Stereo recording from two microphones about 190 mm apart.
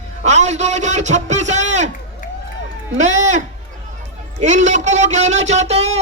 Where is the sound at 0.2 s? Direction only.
35° right (ahead or behind).